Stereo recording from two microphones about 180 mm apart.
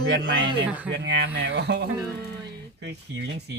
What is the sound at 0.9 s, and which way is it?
Speech, 75° right (ahead or behind).